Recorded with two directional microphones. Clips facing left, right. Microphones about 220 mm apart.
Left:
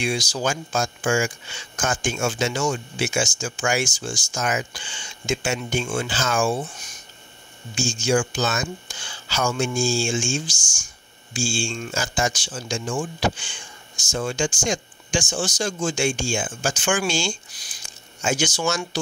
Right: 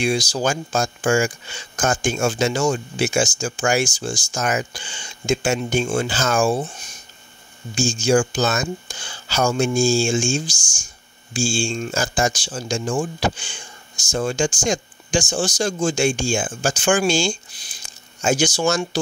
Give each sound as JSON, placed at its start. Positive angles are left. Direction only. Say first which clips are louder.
{"t": 0.0, "sound": "speech", "louder": "right 4 dB", "side_deg": -35}